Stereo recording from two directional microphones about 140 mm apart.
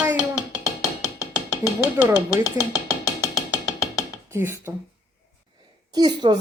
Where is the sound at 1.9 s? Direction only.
15° right (ahead or behind).